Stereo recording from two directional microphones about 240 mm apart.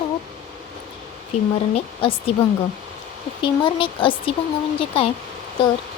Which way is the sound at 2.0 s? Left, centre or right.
Left.